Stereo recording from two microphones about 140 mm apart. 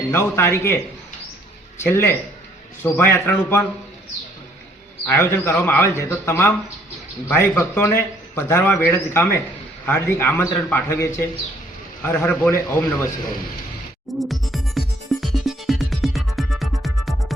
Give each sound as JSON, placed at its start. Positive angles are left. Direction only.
{"t": 0.3, "sound": "a man's voice", "side_deg": 15}
{"t": 1.8, "sound": "a man's voice", "side_deg": 15}
{"t": 5.0, "sound": "a man's voice", "side_deg": 20}
{"t": 14.2, "sound": "music", "side_deg": 0}